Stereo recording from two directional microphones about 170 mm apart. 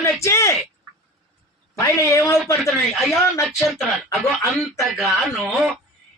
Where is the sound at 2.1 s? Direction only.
15° left (ahead or behind).